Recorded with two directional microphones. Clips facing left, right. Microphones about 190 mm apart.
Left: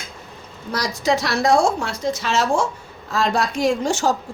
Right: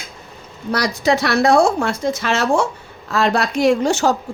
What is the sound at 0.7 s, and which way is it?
A woman's voice, 65° right (ahead or behind).